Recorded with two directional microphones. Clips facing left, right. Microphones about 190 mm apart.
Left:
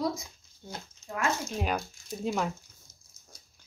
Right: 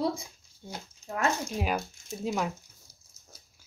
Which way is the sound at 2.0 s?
5° right (ahead or behind).